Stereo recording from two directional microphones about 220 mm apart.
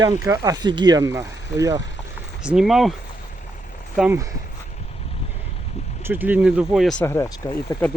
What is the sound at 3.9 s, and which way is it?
Speech, 5° right (ahead or behind).